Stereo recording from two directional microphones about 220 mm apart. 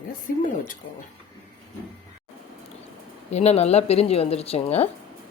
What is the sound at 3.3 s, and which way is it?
Speech, 30° left (ahead or behind).